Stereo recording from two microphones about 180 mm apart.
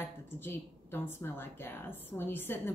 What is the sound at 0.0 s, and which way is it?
A woman's voice, 10° left (ahead or behind).